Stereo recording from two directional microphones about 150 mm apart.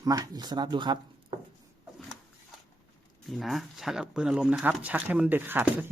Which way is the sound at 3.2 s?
Centre (ahead or behind).